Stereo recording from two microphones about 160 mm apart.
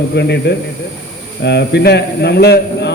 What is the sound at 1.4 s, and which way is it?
A man's voice, 90° left.